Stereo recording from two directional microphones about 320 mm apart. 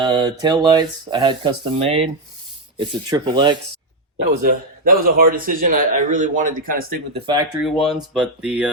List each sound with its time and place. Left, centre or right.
0.0 s speech: centre
4.4 s a man's voice: right
7.3 s speech: centre